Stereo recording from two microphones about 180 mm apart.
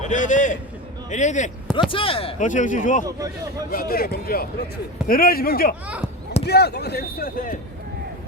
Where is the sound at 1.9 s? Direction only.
30° left (ahead or behind).